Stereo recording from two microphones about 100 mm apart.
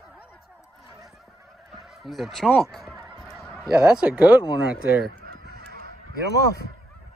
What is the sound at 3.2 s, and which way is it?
Fowl, centre (ahead or behind).